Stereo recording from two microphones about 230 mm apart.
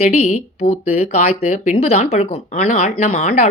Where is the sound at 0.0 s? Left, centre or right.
Left.